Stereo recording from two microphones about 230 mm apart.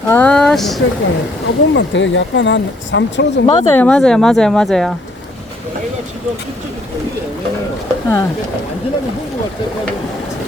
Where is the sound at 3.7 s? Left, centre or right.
Centre.